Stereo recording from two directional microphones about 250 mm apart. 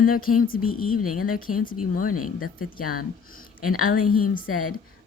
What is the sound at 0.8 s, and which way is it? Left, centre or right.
Speech, left.